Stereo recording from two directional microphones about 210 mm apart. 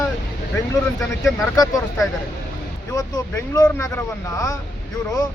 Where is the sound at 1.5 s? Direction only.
15° left (ahead or behind).